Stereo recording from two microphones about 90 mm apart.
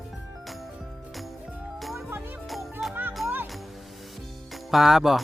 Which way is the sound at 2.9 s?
20° right (ahead or behind).